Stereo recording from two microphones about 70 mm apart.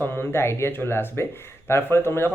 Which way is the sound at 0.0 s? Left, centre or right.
Left.